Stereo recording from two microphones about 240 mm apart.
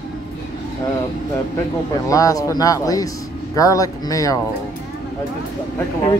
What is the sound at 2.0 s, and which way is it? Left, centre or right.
Speech, centre.